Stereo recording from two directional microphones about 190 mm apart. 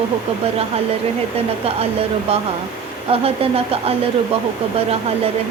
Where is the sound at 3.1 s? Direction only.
30° right (ahead or behind).